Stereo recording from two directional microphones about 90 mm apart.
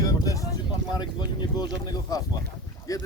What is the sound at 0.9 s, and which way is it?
Speech, 55° left (ahead or behind).